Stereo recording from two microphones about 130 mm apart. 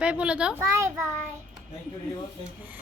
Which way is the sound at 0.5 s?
20° right (ahead or behind).